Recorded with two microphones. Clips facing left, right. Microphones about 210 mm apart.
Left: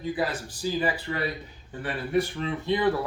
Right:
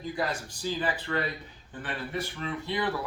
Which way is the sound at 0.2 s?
5° left (ahead or behind).